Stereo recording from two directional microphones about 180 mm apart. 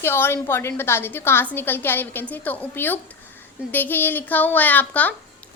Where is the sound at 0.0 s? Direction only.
15° left (ahead or behind).